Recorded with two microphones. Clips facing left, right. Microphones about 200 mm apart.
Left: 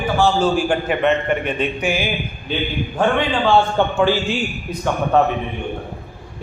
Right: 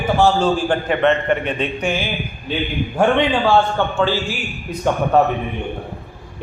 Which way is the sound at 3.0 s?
15° right (ahead or behind).